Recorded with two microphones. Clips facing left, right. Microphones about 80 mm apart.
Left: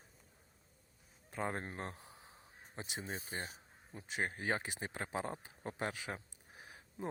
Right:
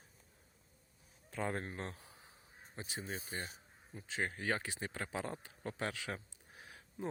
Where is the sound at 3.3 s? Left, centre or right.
Left.